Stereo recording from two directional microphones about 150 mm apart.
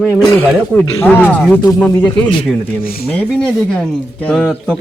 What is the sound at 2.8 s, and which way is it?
Speech, 75° left (ahead or behind).